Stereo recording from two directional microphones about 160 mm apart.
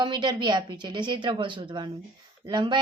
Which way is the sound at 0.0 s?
30° right (ahead or behind).